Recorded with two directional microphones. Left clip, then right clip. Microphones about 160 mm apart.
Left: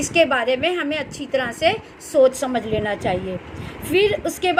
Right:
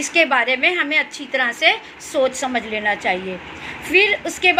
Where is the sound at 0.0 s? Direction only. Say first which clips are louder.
Right 1 dB; 55° left (ahead or behind).